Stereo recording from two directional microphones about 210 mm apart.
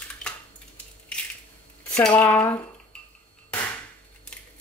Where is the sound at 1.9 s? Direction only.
5° left (ahead or behind).